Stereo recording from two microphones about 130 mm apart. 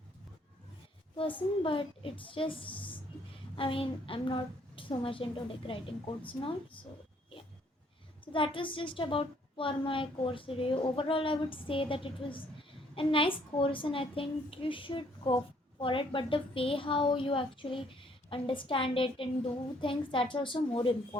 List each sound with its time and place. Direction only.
1.6 s a woman's voice: 45° left (ahead or behind)
8.2 s a woman's voice: 40° left (ahead or behind)